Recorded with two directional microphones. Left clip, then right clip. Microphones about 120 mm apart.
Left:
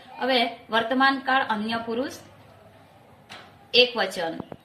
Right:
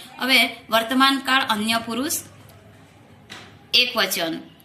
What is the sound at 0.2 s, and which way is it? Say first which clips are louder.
A woman's voice: right 5 dB; 45° left (ahead or behind).